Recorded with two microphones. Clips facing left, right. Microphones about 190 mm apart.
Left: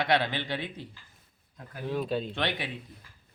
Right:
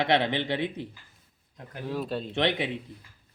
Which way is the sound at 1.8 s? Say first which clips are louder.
Left 1 dB; centre (ahead or behind).